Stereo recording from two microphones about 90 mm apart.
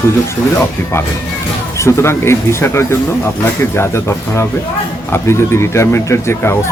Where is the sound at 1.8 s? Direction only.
30° left (ahead or behind).